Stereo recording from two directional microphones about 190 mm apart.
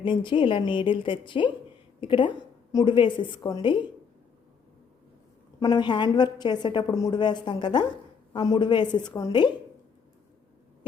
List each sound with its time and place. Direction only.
0.0 s a woman's voice: 25° left (ahead or behind)
5.5 s a woman's voice: 20° left (ahead or behind)